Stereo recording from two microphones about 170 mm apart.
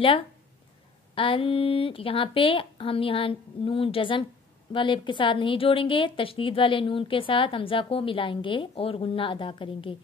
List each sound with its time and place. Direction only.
1.1 s a woman's voice: 30° left (ahead or behind)